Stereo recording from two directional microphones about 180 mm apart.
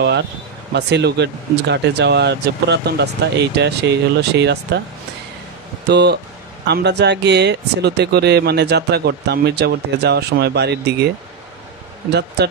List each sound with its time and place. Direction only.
0.7 s speech: 70° right (ahead or behind)
5.9 s speech: 70° right (ahead or behind)
12.1 s speech: 70° right (ahead or behind)